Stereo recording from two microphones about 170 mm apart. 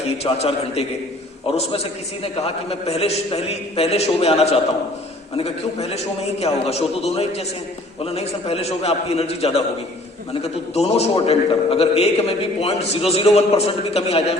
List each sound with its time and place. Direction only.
0.2 s a man's voice: 35° left (ahead or behind)